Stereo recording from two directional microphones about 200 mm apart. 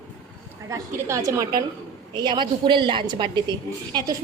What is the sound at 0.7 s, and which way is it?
A woman's voice, 15° right (ahead or behind).